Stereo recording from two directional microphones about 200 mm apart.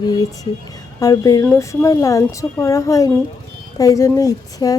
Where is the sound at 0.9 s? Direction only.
15° left (ahead or behind).